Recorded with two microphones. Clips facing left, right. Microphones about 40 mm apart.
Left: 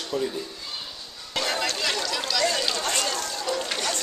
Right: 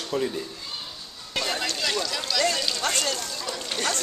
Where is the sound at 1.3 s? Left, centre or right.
Centre.